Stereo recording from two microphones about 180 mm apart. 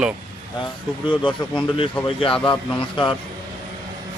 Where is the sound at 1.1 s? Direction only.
25° left (ahead or behind).